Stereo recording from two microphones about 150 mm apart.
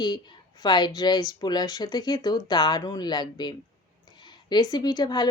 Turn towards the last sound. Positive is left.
turn(degrees=25)  # may be behind; listen again after turning